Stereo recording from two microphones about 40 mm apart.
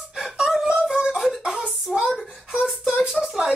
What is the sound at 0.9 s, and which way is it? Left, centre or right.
Beatboxing, centre.